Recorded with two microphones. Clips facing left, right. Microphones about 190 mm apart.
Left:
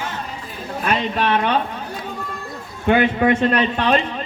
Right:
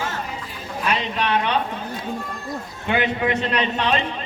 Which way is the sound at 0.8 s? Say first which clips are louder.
Left 3 dB; 50° left (ahead or behind).